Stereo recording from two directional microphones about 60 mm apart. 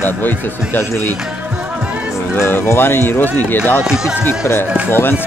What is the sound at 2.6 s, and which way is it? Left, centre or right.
Speech, left.